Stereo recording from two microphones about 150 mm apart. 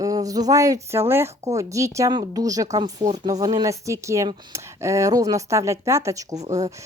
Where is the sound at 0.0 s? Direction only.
25° right (ahead or behind).